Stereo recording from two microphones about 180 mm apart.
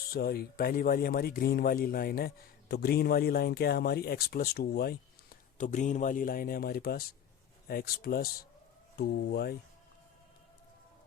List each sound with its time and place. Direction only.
0.1 s speech: 60° left (ahead or behind)
5.5 s a man's voice: 45° left (ahead or behind)